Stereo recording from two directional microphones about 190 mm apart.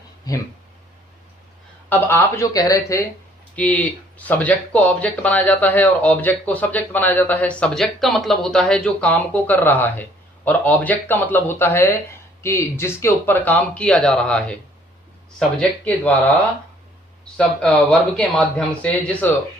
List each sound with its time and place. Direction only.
1.9 s speech: 10° left (ahead or behind)
17.3 s speech: 5° left (ahead or behind)